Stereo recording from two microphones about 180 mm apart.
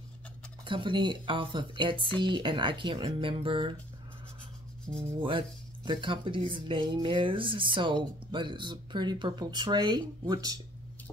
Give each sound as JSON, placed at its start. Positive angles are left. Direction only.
{"t": 0.7, "sound": "speech", "side_deg": -25}
{"t": 4.9, "sound": "speech", "side_deg": -30}